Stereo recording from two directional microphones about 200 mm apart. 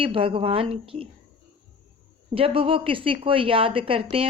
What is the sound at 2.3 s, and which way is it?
Speech, 30° right (ahead or behind).